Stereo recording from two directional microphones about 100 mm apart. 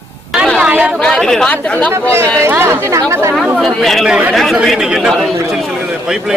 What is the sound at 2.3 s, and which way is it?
Speech, 25° right (ahead or behind).